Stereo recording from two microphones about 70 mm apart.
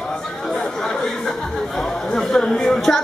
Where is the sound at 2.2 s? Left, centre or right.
Centre.